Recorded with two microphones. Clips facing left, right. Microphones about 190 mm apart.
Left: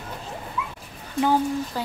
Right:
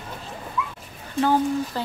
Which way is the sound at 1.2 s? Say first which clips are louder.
Right 1 dB; 10° left (ahead or behind).